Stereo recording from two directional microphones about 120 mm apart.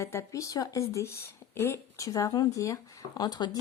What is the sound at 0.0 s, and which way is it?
Speech, 25° left (ahead or behind).